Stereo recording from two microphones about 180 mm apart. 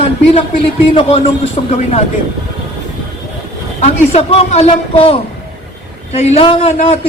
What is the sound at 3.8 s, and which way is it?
Speech, 35° left (ahead or behind).